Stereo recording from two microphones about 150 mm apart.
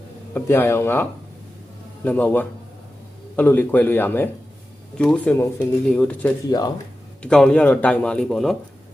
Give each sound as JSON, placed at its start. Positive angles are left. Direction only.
{"t": 0.3, "sound": "speech", "side_deg": 15}
{"t": 2.0, "sound": "speech", "side_deg": 10}
{"t": 6.5, "sound": "speech", "side_deg": 25}
{"t": 7.2, "sound": "speech", "side_deg": 5}